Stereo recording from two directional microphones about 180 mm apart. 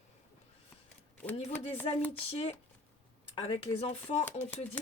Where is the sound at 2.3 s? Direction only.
35° left (ahead or behind).